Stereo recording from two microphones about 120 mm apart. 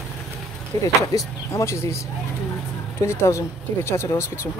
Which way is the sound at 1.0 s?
25° left (ahead or behind).